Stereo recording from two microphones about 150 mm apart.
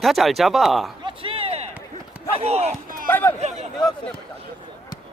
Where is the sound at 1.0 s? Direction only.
35° right (ahead or behind).